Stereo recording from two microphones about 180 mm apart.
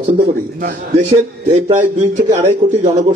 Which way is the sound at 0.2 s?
55° right (ahead or behind).